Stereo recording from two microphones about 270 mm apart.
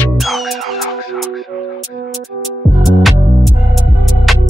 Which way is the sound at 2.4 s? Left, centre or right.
Centre.